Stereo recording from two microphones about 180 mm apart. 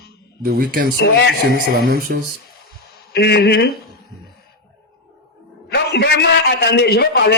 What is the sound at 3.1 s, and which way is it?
Speech, 65° left (ahead or behind).